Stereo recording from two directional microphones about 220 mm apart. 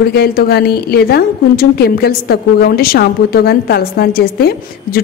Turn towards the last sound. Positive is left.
turn(degrees=45)  # may be behind; listen again after turning